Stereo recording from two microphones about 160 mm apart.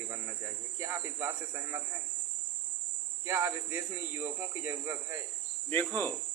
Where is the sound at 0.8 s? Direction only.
15° right (ahead or behind).